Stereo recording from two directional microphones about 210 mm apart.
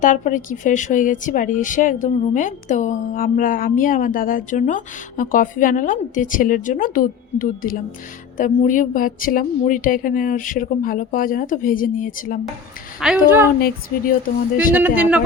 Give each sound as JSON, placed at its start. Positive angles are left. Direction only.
{"t": 0.0, "sound": "speech", "side_deg": 40}
{"t": 13.0, "sound": "a woman's voice", "side_deg": -5}
{"t": 14.8, "sound": "a woman's voice", "side_deg": -10}